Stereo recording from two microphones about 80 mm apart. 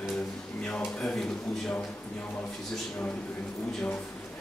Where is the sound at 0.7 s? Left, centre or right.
Centre.